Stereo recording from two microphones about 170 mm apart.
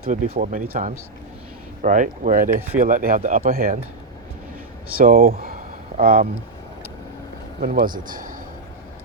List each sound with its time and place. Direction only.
0.0 s speech: 60° right (ahead or behind)
4.9 s speech: 60° right (ahead or behind)
7.6 s speech: 60° right (ahead or behind)